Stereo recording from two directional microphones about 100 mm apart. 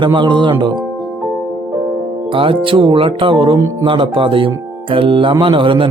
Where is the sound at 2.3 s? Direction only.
60° right (ahead or behind).